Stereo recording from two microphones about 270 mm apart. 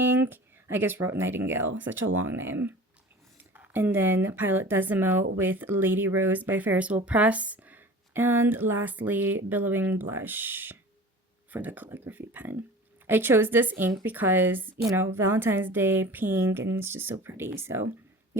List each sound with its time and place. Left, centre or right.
0.0 s speech: centre
1.9 s speech: right
2.1 s speech: centre